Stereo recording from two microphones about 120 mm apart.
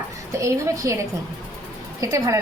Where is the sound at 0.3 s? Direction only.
25° right (ahead or behind).